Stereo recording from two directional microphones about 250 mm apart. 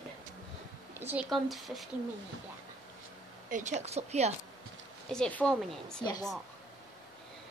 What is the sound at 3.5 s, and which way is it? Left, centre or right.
Speech, right.